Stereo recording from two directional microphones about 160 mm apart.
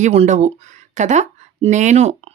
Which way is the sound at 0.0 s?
45° right (ahead or behind).